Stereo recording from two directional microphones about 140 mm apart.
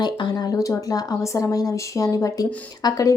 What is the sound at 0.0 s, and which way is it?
Speech, 30° left (ahead or behind).